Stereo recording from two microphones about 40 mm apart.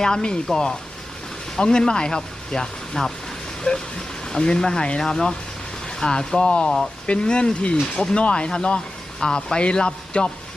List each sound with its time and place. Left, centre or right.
0.0 s speech: left
4.3 s speech: left